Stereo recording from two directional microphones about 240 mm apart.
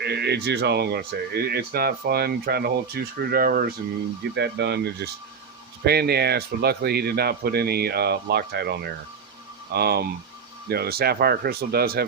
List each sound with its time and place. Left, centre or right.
0.0 s speech: right